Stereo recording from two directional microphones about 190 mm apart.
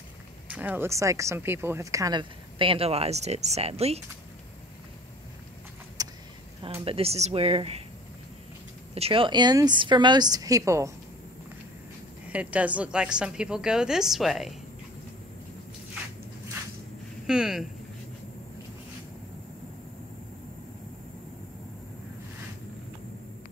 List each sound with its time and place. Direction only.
0.5 s speech: 10° right (ahead or behind); by 4.0 s 35° right (ahead or behind)
6.0 s vehicle: 20° right (ahead or behind)
6.6 s speech: 30° right (ahead or behind)
8.9 s speech: 30° right (ahead or behind)
12.3 s a woman's voice: 5° right (ahead or behind)
17.3 s a woman's voice: 5° right (ahead or behind)